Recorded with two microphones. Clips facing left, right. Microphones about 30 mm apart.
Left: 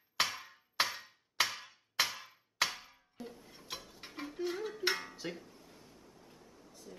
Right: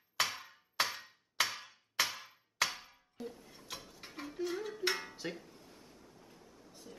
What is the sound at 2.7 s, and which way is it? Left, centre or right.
Clock, centre.